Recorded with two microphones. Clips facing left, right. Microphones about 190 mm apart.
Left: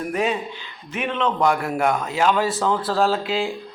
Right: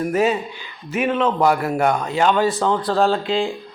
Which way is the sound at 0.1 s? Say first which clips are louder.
Right 4 dB; 5° right (ahead or behind).